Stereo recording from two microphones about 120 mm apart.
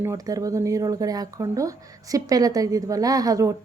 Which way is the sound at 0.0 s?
25° right (ahead or behind).